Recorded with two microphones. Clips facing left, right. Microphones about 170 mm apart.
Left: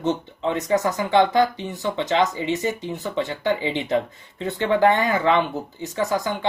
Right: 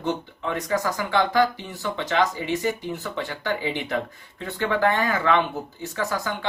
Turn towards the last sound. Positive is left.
turn(degrees=20)  # may be behind; listen again after turning